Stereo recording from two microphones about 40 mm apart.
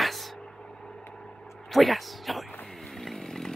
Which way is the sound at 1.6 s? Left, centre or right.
Centre.